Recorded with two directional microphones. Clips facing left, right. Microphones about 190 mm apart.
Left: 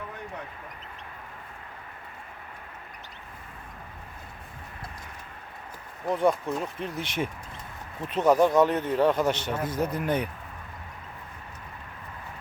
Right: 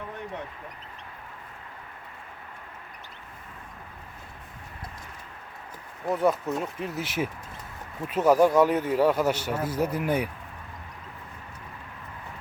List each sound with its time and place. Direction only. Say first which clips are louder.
6.1 s speech: even; 5° right (ahead or behind)